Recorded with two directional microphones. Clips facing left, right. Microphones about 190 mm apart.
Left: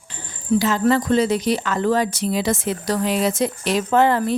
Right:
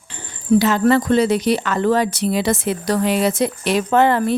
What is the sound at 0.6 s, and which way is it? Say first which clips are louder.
Speech: right 3 dB; 65° right (ahead or behind).